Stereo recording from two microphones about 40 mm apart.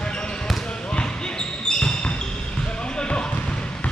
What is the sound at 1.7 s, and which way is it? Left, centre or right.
Basketball bounce, centre.